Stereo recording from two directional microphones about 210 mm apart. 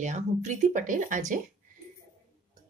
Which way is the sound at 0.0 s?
35° right (ahead or behind).